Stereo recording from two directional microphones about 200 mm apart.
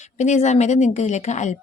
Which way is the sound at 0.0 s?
35° left (ahead or behind).